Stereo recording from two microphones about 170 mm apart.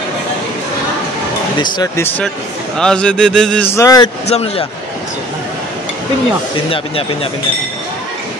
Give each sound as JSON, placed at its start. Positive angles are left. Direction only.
{"t": 1.6, "sound": "speech", "side_deg": 25}
{"t": 2.8, "sound": "speech", "side_deg": 5}
{"t": 4.3, "sound": "a man's voice", "side_deg": 35}